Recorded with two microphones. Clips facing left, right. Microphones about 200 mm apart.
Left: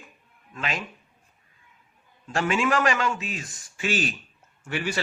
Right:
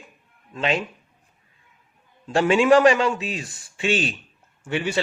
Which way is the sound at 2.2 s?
35° right (ahead or behind).